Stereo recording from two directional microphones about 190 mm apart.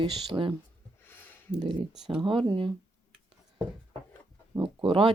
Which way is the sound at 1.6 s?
25° right (ahead or behind).